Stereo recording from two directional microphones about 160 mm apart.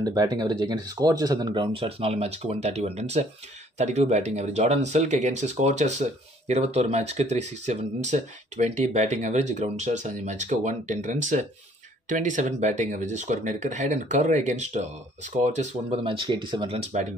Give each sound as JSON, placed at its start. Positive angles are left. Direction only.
{"t": 0.0, "sound": "speech", "side_deg": -25}